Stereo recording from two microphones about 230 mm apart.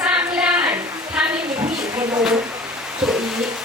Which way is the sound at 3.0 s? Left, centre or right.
Centre.